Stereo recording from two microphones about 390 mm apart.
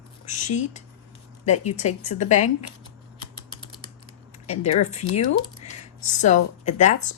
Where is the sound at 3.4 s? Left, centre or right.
Centre.